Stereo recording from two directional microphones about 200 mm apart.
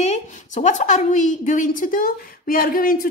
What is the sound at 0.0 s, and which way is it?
A woman's voice, 35° left (ahead or behind).